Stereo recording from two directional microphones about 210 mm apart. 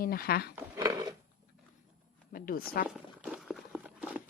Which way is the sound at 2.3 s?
45° left (ahead or behind).